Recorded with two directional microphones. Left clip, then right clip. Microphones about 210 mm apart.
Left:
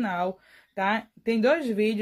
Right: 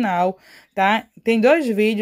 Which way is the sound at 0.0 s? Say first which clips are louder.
Right 9 dB; 40° right (ahead or behind).